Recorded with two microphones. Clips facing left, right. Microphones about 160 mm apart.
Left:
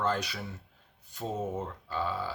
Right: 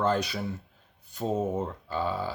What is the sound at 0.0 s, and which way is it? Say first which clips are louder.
Speech: right 5 dB; 20° right (ahead or behind).